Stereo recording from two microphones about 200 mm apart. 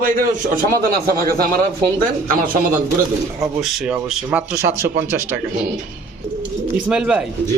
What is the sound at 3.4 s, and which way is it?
Speech, 5° right (ahead or behind).